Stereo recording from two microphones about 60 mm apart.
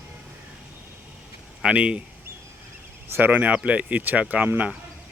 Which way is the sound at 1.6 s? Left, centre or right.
Centre.